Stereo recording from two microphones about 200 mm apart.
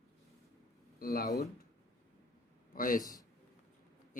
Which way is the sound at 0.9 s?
50° left (ahead or behind).